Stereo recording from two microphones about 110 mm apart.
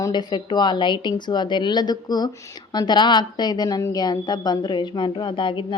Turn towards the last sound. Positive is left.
turn(degrees=50)  # may be behind; listen again after turning